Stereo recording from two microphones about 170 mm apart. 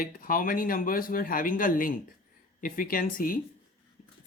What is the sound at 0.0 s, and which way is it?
Speech, 55° left (ahead or behind).